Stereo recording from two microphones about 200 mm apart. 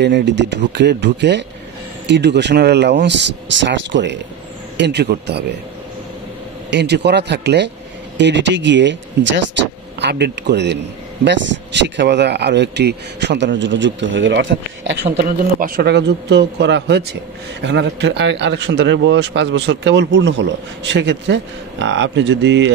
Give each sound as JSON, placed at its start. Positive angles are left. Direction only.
{"t": 0.0, "sound": "speech", "side_deg": -60}
{"t": 6.7, "sound": "speech", "side_deg": -60}